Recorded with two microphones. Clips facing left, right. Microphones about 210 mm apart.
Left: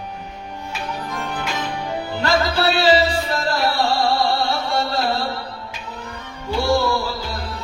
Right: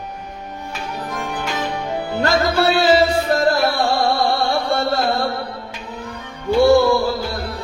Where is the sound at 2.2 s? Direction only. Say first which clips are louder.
Right 2 dB; 55° right (ahead or behind).